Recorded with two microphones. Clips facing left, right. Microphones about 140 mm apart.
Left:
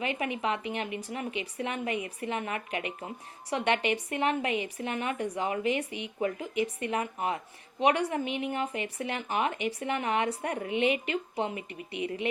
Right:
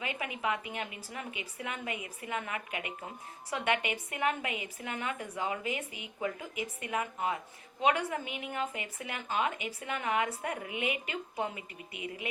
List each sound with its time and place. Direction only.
0.2 s speech: 25° left (ahead or behind)